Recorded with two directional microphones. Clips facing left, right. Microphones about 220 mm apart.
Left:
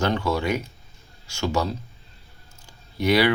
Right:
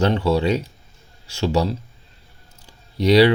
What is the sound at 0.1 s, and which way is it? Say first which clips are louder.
Speech: right 5 dB; 30° right (ahead or behind).